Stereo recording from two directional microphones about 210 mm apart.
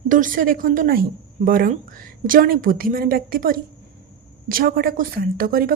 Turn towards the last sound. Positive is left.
turn(degrees=-45)  # may be behind; listen again after turning